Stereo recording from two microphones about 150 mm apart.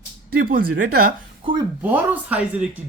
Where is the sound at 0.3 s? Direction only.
80° right.